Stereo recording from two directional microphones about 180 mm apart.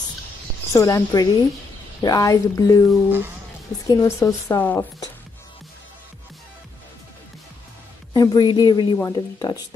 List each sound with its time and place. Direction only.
0.7 s speech: 20° left (ahead or behind)
8.1 s speech: 20° left (ahead or behind)